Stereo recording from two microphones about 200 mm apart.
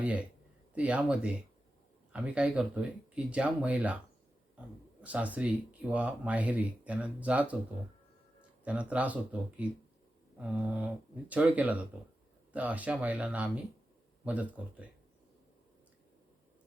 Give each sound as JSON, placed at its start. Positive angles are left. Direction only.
{"t": 0.0, "sound": "speech", "side_deg": -5}
{"t": 4.9, "sound": "speech", "side_deg": -5}